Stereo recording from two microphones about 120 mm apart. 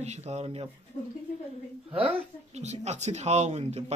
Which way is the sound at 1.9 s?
10° right (ahead or behind).